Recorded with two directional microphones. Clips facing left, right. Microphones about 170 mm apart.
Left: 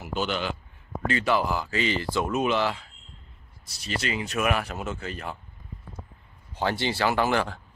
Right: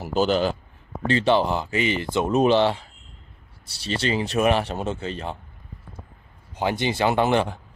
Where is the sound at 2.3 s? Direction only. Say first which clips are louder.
Right 8 dB; 30° right (ahead or behind).